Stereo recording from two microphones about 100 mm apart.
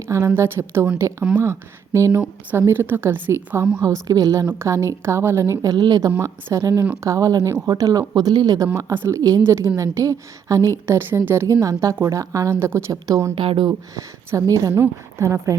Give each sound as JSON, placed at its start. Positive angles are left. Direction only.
{"t": 0.1, "sound": "a woman's voice", "side_deg": -25}
{"t": 3.8, "sound": "a woman's voice", "side_deg": -35}
{"t": 4.4, "sound": "a woman's voice", "side_deg": -25}
{"t": 5.7, "sound": "speech", "side_deg": -45}
{"t": 6.1, "sound": "a woman's voice", "side_deg": -30}
{"t": 8.6, "sound": "a woman's voice", "side_deg": -25}
{"t": 13.3, "sound": "speech", "side_deg": -60}
{"t": 14.3, "sound": "a woman's voice", "side_deg": -35}